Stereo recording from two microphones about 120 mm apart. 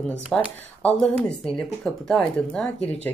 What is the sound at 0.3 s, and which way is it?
A woman's voice, 5° left (ahead or behind).